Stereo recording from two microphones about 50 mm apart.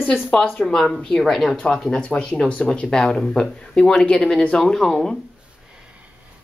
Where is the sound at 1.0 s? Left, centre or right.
Centre.